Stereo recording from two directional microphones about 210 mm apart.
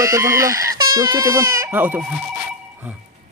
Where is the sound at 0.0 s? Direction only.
15° right (ahead or behind).